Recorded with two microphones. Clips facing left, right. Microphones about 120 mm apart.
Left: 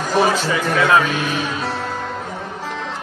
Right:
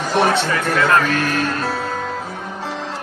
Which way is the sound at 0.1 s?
5° left (ahead or behind).